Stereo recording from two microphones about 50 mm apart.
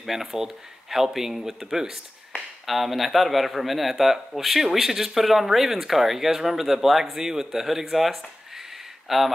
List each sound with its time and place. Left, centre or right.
0.0 s speech: centre